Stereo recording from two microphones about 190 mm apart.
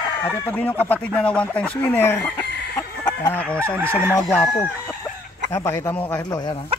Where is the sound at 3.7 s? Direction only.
10° right (ahead or behind).